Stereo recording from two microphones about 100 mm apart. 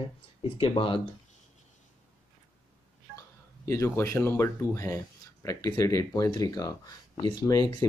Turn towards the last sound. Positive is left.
turn(degrees=45)  # may be behind; listen again after turning